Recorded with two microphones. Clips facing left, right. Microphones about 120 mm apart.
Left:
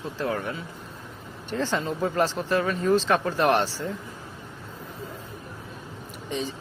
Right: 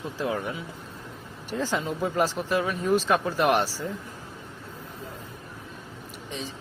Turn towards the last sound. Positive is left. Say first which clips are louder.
# left 6 dB
turn(degrees=0)  # may be behind; listen again after turning